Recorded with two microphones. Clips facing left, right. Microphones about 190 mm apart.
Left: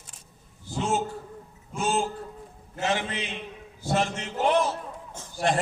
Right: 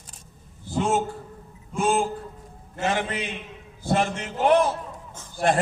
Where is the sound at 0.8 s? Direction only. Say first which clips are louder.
Right 4 dB; 55° right (ahead or behind).